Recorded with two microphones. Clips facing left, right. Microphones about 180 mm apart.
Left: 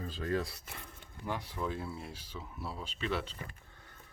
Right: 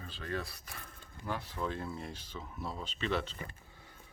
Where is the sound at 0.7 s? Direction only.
15° left (ahead or behind).